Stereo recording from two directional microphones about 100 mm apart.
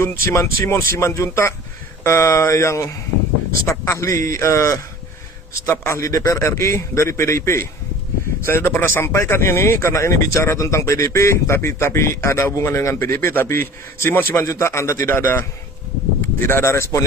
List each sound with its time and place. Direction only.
0.0 s speech: 30° left (ahead or behind)
16.5 s speech: 25° left (ahead or behind)